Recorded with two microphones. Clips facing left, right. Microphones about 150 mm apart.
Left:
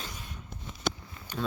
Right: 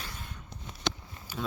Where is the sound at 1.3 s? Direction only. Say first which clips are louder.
Left 3 dB; 5° right (ahead or behind).